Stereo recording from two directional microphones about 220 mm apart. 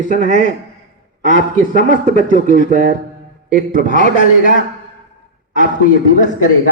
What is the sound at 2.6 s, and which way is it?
Speech, 35° right (ahead or behind).